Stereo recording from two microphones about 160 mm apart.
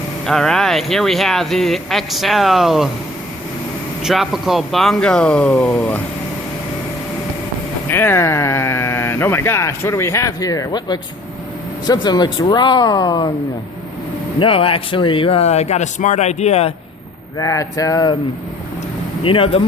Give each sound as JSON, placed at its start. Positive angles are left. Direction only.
{"t": 0.3, "sound": "speech", "side_deg": 5}
{"t": 4.0, "sound": "speech", "side_deg": 0}
{"t": 7.9, "sound": "speech", "side_deg": 15}
{"t": 14.3, "sound": "speech", "side_deg": 35}
{"t": 17.3, "sound": "speech", "side_deg": 20}
{"t": 19.2, "sound": "speech", "side_deg": 35}